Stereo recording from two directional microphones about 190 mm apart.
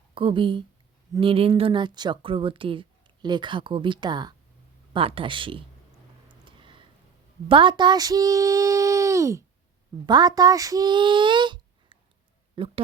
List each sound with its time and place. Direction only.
0.1 s a woman's voice: 25° right (ahead or behind)
6.4 s a sound: 25° right (ahead or behind)
7.4 s speech: 25° right (ahead or behind)